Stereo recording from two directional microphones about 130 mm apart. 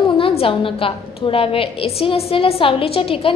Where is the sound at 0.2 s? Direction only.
45° left (ahead or behind).